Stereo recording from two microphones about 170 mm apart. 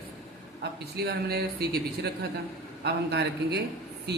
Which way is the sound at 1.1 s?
70° right (ahead or behind).